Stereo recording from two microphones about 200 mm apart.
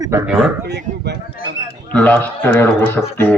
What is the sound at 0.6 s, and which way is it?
Speech, 55° right (ahead or behind).